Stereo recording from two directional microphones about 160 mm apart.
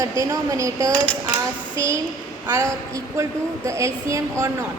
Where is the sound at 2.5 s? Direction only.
20° right (ahead or behind).